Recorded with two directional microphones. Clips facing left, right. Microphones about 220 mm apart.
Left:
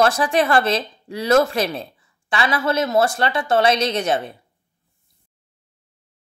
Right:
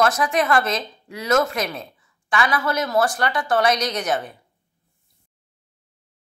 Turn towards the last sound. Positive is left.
turn(degrees=25)  # may be behind; listen again after turning